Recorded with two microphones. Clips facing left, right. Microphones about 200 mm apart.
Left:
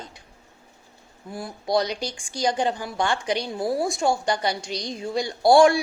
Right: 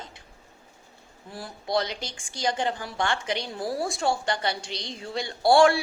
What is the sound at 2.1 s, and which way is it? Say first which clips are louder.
A woman's voice: left 3 dB; 15° left (ahead or behind).